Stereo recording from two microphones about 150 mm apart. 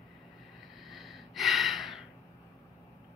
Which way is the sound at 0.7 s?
Centre (ahead or behind).